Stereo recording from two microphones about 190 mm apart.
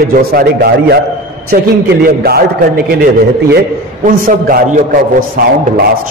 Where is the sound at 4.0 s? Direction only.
45° right (ahead or behind).